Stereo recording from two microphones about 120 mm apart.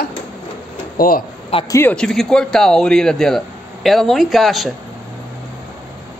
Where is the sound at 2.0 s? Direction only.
5° left (ahead or behind).